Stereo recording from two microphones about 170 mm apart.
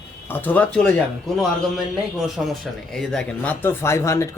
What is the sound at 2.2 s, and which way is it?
Speech, centre (ahead or behind).